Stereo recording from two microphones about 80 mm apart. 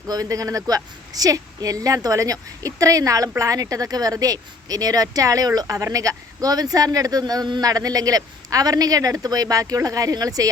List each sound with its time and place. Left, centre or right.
0.1 s speech: right
7.7 s speech: right